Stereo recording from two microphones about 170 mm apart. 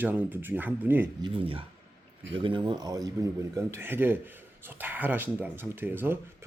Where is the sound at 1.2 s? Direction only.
30° right (ahead or behind).